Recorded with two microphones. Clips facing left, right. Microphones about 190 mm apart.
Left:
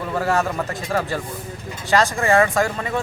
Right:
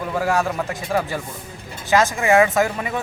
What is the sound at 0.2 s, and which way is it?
Speech, 5° right (ahead or behind).